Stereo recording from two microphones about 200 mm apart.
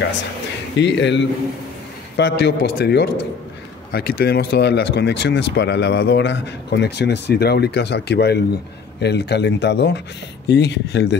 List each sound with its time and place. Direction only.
0.7 s speech: 60° left (ahead or behind)